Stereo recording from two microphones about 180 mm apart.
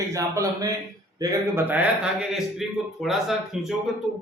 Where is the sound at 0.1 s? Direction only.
15° right (ahead or behind).